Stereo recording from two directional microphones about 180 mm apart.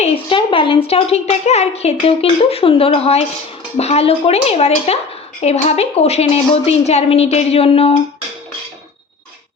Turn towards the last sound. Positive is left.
turn(degrees=35)  # may be behind; listen again after turning